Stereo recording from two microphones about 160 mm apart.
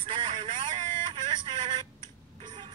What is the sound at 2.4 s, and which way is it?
Vehicle, 30° right (ahead or behind).